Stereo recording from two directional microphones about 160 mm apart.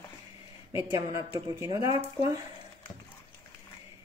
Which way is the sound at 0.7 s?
15° right (ahead or behind).